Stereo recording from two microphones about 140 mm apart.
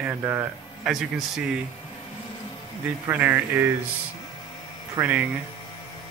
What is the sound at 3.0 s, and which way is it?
Speech, 15° right (ahead or behind).